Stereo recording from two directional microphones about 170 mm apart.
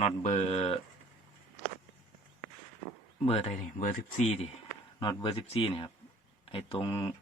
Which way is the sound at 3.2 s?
40° left (ahead or behind).